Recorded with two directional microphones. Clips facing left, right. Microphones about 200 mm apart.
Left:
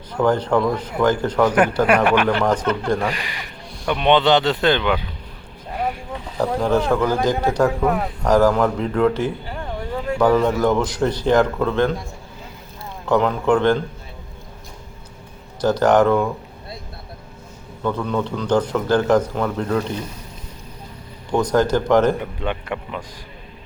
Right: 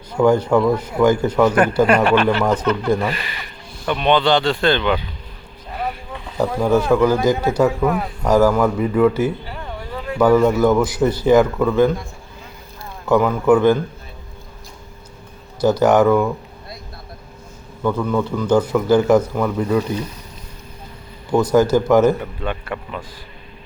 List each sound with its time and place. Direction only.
0.1 s a man's voice: 10° right (ahead or behind)
1.5 s speech: 10° left (ahead or behind)
2.4 s a man's voice: 10° right (ahead or behind)
3.1 s speech: 15° left (ahead or behind)
6.3 s a man's voice: 10° right (ahead or behind)
13.1 s a man's voice: 5° right (ahead or behind)
15.6 s a man's voice: 10° right (ahead or behind)
17.8 s a man's voice: 5° right (ahead or behind)
21.3 s a man's voice: 5° right (ahead or behind)
22.2 s speech: 15° left (ahead or behind)